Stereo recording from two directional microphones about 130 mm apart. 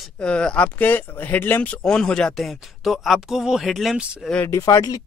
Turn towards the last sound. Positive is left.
turn(degrees=30)  # may be behind; listen again after turning